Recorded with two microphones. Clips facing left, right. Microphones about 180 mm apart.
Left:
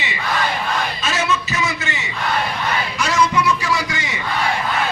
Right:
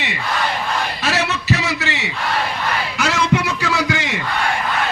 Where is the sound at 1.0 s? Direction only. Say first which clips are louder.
Right 3 dB; 65° right (ahead or behind).